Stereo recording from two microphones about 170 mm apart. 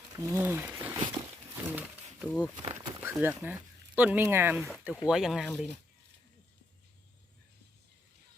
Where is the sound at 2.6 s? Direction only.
40° right (ahead or behind).